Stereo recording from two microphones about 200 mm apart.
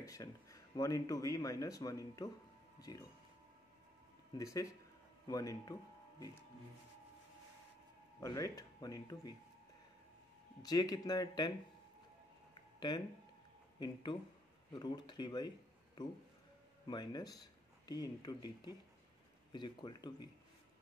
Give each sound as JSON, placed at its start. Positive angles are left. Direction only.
{"t": 0.0, "sound": "speech", "side_deg": 15}
{"t": 4.4, "sound": "speech", "side_deg": 15}
{"t": 8.2, "sound": "speech", "side_deg": 15}
{"t": 10.6, "sound": "speech", "side_deg": 20}
{"t": 13.7, "sound": "speech", "side_deg": 20}